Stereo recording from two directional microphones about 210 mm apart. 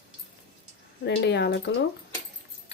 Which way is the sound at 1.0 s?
55° left (ahead or behind).